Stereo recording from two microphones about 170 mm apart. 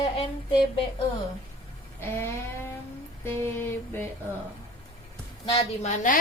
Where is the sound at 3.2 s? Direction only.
15° left (ahead or behind).